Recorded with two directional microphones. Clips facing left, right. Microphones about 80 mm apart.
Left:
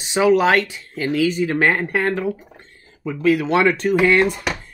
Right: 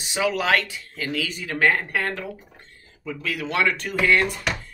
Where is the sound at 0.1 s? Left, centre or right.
Left.